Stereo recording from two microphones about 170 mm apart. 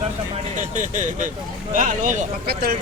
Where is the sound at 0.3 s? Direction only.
45° right (ahead or behind).